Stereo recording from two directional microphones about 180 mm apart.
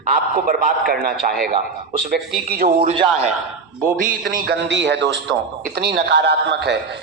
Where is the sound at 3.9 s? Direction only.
50° right (ahead or behind).